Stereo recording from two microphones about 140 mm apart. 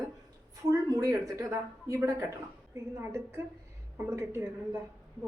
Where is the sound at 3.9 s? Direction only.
20° right (ahead or behind).